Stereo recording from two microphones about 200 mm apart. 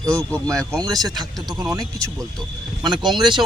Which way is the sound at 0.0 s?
15° right (ahead or behind).